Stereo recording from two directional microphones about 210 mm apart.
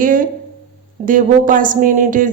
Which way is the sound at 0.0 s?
40° right (ahead or behind).